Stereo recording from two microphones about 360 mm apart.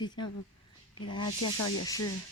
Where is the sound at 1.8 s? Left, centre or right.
Centre.